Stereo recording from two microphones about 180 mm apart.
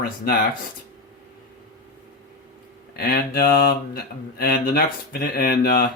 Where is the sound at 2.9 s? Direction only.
60° left (ahead or behind).